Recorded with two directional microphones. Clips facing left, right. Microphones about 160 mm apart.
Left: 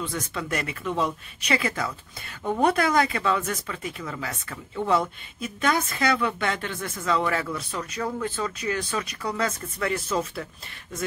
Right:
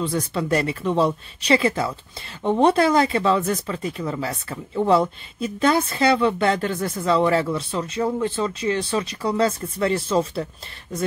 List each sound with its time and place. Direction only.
0.0 s speech: 35° right (ahead or behind)